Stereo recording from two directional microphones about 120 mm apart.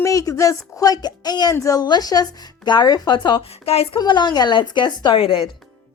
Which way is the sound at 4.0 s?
35° left (ahead or behind).